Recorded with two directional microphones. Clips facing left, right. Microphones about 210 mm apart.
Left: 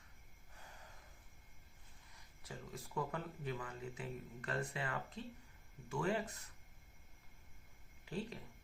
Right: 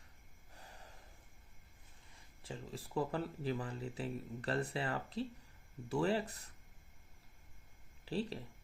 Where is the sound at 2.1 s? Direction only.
30° right (ahead or behind).